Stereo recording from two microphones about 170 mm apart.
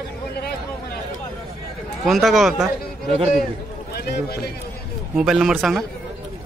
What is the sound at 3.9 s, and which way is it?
Speech, 65° left (ahead or behind).